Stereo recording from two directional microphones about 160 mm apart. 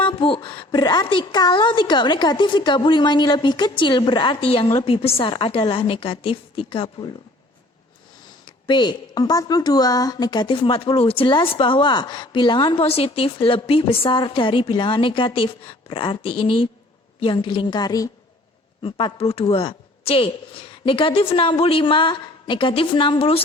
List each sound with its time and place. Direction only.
0.0 s a woman's voice: 30° left (ahead or behind)
8.4 s a woman's voice: 30° left (ahead or behind)